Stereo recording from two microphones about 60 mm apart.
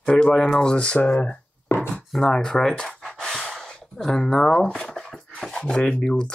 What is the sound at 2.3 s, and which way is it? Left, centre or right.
Gasp, centre.